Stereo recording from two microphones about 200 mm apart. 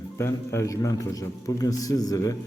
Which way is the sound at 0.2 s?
15° left (ahead or behind).